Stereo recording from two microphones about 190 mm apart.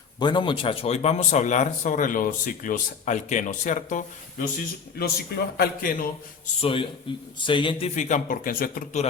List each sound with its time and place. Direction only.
0.2 s speech: 25° left (ahead or behind); by 4.4 s 40° left (ahead or behind)
4.9 s a man's voice: 55° left (ahead or behind)
6.6 s a man's voice: 30° left (ahead or behind); by 9.0 s 50° left (ahead or behind)